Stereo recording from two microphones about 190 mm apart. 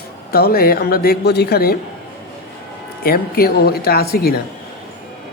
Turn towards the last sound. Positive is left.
turn(degrees=55)  # may be behind; listen again after turning